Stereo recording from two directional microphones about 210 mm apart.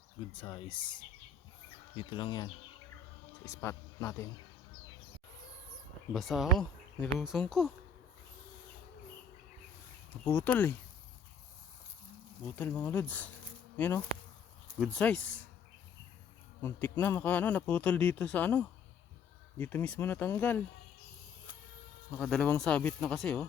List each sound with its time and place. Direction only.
0.3 s speech: 25° left (ahead or behind)
2.0 s speech: 25° left (ahead or behind)
6.1 s speech: centre (ahead or behind)
10.2 s speech: 10° left (ahead or behind)
12.5 s speech: 10° left (ahead or behind)
16.6 s speech: 10° left (ahead or behind)
22.2 s speech: 5° left (ahead or behind)